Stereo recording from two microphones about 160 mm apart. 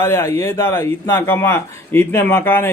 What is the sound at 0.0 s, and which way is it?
Speech, 20° left (ahead or behind).